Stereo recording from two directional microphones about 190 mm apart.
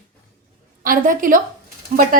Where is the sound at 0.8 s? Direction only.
45° right (ahead or behind).